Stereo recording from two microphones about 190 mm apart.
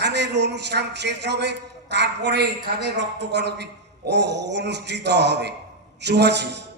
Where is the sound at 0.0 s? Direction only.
65° right (ahead or behind).